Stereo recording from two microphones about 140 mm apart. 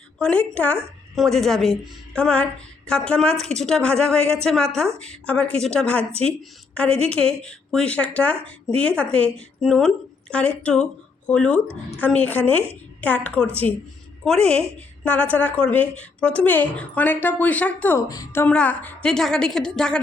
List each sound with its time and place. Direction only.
0.2 s a woman's voice: 5° left (ahead or behind)
18.1 s a woman's voice: 25° left (ahead or behind)
18.4 s a woman's voice: 10° left (ahead or behind)